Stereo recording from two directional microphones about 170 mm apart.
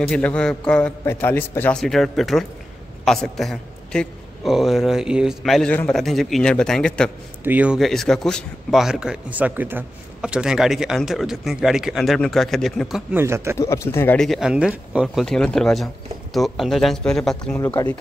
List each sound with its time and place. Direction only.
0.0 s a man's voice: 5° left (ahead or behind)
7.4 s a man's voice: 10° right (ahead or behind)
13.1 s speech: 15° right (ahead or behind)
13.6 s speech: 15° left (ahead or behind)
14.1 s a man's voice: centre (ahead or behind)
17.6 s speech: 15° left (ahead or behind)